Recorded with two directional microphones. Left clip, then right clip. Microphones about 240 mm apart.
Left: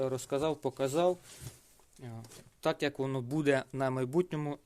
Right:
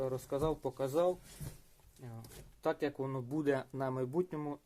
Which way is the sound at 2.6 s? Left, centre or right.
Left.